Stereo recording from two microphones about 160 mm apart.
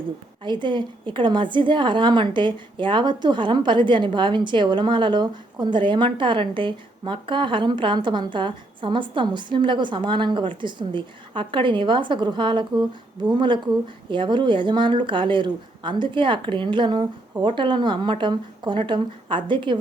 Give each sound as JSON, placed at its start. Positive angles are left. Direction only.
{"t": 0.4, "sound": "a woman's voice", "side_deg": -30}